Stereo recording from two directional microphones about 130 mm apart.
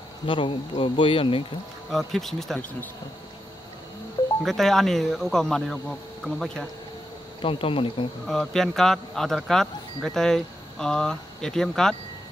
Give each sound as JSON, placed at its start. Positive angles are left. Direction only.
{"t": 0.3, "sound": "speech", "side_deg": 40}
{"t": 1.9, "sound": "speech", "side_deg": 0}
{"t": 4.4, "sound": "speech", "side_deg": 0}
{"t": 7.4, "sound": "speech", "side_deg": 45}
{"t": 8.3, "sound": "speech", "side_deg": 5}